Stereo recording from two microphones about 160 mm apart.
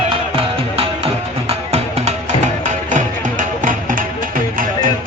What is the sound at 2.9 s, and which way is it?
Music, 55° right (ahead or behind).